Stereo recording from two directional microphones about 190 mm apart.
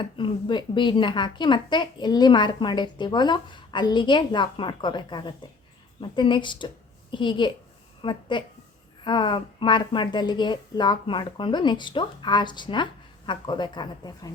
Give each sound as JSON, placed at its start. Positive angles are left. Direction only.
{"t": 0.0, "sound": "speech", "side_deg": 25}